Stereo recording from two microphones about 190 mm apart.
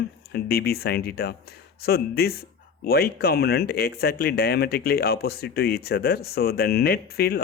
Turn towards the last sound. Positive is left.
turn(degrees=55)  # may be behind; listen again after turning